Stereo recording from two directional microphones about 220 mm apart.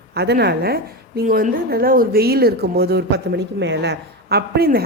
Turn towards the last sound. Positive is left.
turn(degrees=-45)  # may be behind; listen again after turning